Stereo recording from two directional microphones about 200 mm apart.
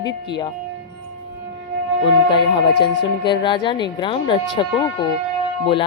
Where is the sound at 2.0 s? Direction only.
25° left (ahead or behind).